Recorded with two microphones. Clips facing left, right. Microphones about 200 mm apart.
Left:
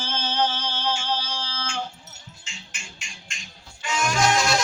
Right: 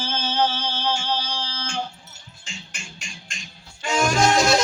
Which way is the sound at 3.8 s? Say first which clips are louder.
Right 3 dB; 40° right (ahead or behind).